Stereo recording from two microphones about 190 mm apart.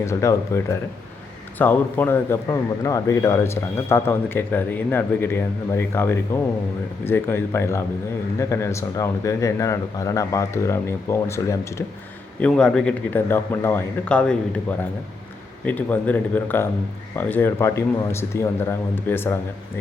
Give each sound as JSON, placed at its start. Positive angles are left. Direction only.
{"t": 0.0, "sound": "a man's voice", "side_deg": 15}
{"t": 12.4, "sound": "a man's voice", "side_deg": 5}